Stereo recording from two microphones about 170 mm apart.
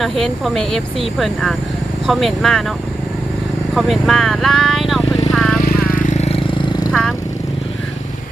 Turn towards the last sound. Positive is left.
turn(degrees=5)  # may be behind; listen again after turning